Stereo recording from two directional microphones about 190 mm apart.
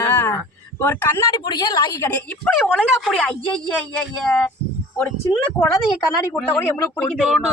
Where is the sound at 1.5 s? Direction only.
25° left (ahead or behind).